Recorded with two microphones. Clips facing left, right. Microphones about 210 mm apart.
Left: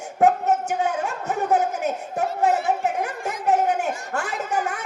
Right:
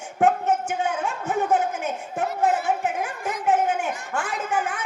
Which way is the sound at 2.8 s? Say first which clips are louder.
Left 2 dB; 40° left (ahead or behind).